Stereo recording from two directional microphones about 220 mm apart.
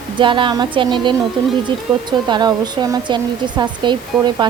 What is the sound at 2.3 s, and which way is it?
Speech, 20° right (ahead or behind).